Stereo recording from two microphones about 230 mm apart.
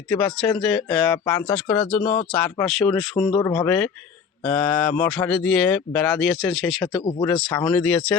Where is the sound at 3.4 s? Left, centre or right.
Centre.